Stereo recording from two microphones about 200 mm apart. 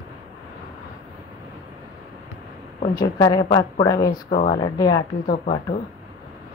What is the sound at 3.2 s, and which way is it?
Speech, 25° left (ahead or behind).